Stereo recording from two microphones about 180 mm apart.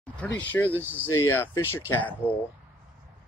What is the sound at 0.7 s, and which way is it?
Speech, 10° right (ahead or behind).